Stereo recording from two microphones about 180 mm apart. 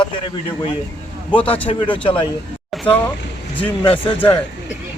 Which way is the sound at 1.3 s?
30° left (ahead or behind).